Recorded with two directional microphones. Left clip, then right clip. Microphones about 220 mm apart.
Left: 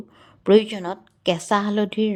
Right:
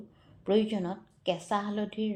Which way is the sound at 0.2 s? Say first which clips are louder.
Left 11 dB; 45° left (ahead or behind).